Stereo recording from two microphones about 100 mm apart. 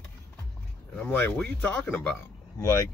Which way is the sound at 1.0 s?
20° left (ahead or behind).